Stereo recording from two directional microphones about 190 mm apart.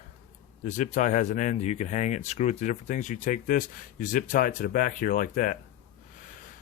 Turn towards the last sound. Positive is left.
turn(degrees=45)  # may be behind; listen again after turning